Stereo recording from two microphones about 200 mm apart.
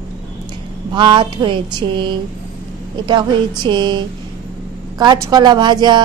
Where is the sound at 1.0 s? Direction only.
25° right (ahead or behind).